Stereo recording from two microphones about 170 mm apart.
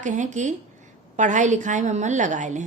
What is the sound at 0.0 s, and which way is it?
A woman's voice, 45° right (ahead or behind).